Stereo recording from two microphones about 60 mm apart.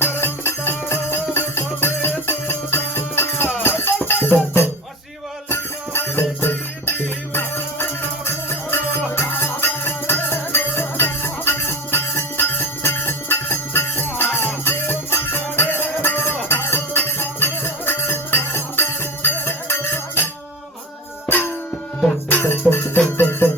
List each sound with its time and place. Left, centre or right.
0.0 s music: left
21.2 s music: left